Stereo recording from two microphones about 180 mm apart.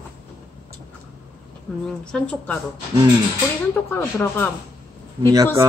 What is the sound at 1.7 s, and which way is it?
Speech, centre (ahead or behind).